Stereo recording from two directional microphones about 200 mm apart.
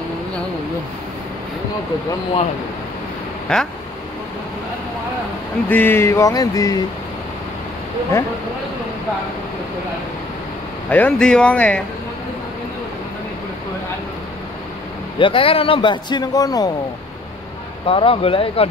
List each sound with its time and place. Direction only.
3.5 s speech: 5° left (ahead or behind)
5.7 s a sound: 10° left (ahead or behind)
10.9 s speech: 5° left (ahead or behind)
15.1 s speech: 25° left (ahead or behind)
17.8 s speech: 25° left (ahead or behind)